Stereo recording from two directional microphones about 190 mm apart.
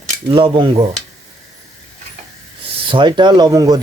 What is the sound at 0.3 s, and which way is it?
Speech, 25° right (ahead or behind).